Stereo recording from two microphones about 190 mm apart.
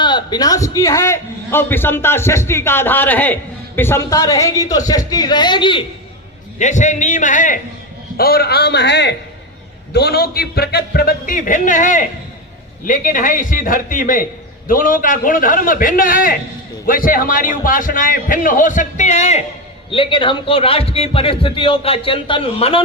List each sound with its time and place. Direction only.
0.0 s a man's voice: 25° left (ahead or behind)
6.6 s a man's voice: 40° left (ahead or behind)
8.1 s a man's voice: 55° left (ahead or behind); by 22.8 s 30° left (ahead or behind)